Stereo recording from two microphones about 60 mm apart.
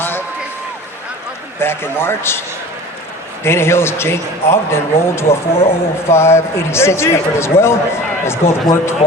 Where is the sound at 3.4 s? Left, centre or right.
Left.